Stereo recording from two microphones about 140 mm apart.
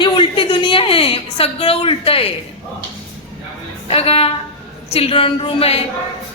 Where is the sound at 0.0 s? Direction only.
35° left (ahead or behind).